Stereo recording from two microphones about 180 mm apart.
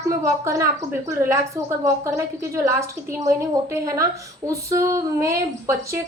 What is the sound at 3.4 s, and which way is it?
A woman's voice, 15° right (ahead or behind).